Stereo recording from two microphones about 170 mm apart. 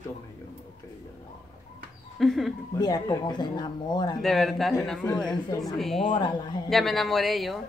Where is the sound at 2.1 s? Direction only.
Centre (ahead or behind).